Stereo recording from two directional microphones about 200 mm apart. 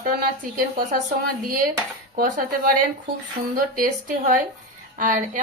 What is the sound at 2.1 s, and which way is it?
Speech, 45° right (ahead or behind).